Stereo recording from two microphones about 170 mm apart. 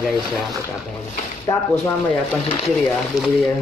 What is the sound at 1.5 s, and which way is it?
Speech, 25° left (ahead or behind).